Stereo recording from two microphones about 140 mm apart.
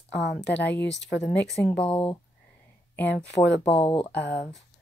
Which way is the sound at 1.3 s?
5° left (ahead or behind).